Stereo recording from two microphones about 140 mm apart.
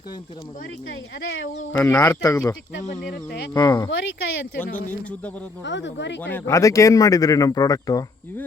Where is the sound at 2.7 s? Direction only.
70° left (ahead or behind).